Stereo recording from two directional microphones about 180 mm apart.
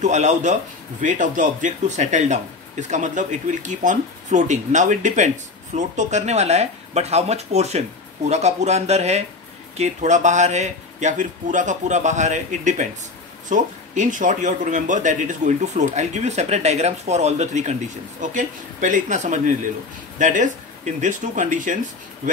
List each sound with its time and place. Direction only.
0.0 s a man's voice: 40° right (ahead or behind)